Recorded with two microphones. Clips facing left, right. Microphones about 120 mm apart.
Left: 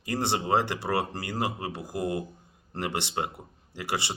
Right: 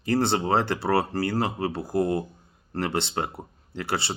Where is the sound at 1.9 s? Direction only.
35° right (ahead or behind).